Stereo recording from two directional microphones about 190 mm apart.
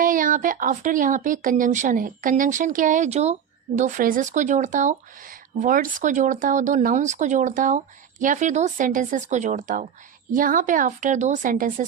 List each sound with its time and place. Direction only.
0.0 s speech: 45° right (ahead or behind)